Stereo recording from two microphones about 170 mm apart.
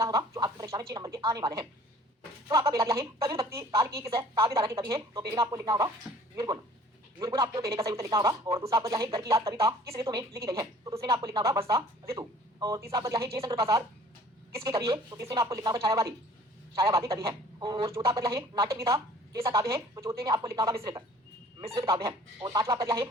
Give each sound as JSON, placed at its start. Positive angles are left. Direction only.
{"t": 0.0, "sound": "a woman's voice", "side_deg": -20}